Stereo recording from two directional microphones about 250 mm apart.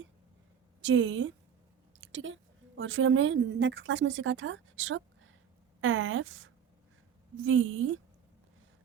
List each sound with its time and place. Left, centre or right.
0.8 s a woman's voice: right